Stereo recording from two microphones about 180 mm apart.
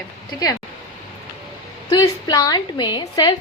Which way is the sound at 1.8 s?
20° left (ahead or behind).